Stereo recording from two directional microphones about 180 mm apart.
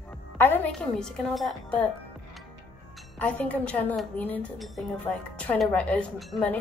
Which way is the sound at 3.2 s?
5° left (ahead or behind).